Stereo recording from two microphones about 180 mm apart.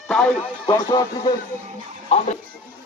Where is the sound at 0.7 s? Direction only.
20° left (ahead or behind).